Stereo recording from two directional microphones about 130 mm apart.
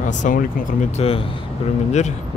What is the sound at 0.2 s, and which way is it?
Speech, 85° left.